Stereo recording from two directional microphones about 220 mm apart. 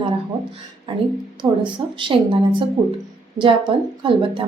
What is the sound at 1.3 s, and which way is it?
Speech, 20° right (ahead or behind).